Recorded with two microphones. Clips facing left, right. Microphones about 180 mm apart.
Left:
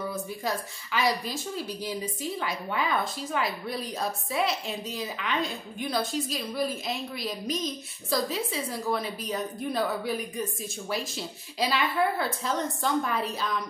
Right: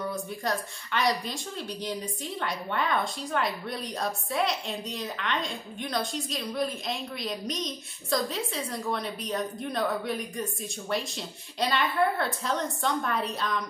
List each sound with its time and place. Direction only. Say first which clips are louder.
0.0 s a woman's voice: even; 5° left (ahead or behind)